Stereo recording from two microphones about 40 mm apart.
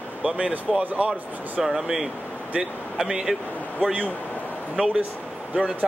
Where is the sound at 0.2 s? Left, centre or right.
Right.